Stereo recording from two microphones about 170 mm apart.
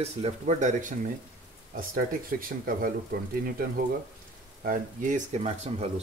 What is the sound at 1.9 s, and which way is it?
Speech, 60° right (ahead or behind).